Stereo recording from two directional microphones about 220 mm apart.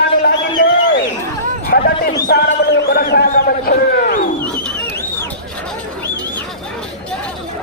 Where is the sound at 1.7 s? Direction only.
45° left (ahead or behind).